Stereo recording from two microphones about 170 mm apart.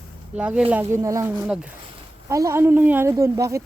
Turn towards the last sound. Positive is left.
turn(degrees=-15)  # may be behind; listen again after turning